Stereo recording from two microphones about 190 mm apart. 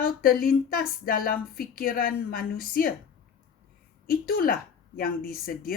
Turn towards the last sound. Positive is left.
turn(degrees=50)  # may be behind; listen again after turning